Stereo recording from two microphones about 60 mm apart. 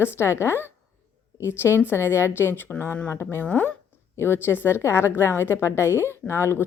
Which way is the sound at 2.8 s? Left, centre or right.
Left.